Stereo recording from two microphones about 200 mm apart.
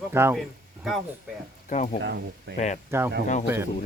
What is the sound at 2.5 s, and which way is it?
Speech, 40° left (ahead or behind).